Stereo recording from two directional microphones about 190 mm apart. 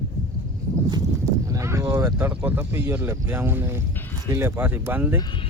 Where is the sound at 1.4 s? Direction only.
15° right (ahead or behind).